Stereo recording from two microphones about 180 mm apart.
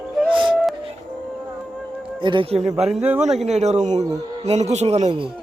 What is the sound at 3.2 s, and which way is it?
Speech, 40° right (ahead or behind).